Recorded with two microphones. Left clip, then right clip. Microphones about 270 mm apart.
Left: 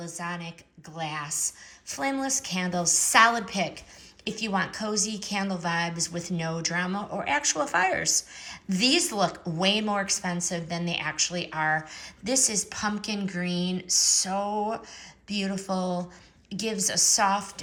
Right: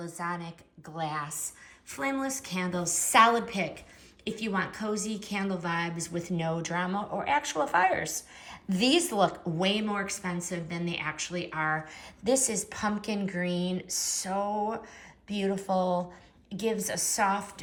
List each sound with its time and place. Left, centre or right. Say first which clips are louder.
0.0 s a woman's voice: even; centre
1.9 s a woman's voice: left 3 dB; centre
6.9 s speech: even; left
7.2 s a woman's voice: left 2 dB; centre